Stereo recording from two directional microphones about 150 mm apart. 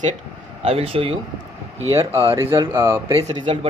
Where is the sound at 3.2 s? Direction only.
35° right (ahead or behind).